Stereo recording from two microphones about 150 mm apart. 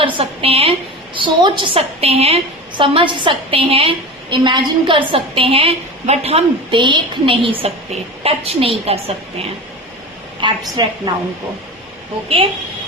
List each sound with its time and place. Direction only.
0.0 s a woman's voice: 40° right (ahead or behind)
10.4 s a woman's voice: 30° right (ahead or behind)